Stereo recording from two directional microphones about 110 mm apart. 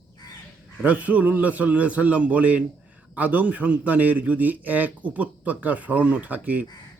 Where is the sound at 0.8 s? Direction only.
15° right (ahead or behind).